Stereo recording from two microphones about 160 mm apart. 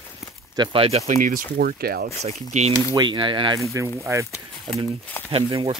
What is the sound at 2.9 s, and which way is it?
Speech, 30° right (ahead or behind).